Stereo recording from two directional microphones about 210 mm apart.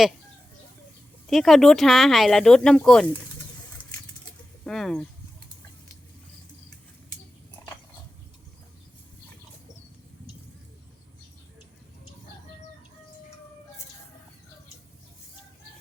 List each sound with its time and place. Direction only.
1.3 s speech: centre (ahead or behind)
3.8 s patter: 20° left (ahead or behind)
4.6 s speech: 5° left (ahead or behind)
7.6 s a sound: 15° left (ahead or behind)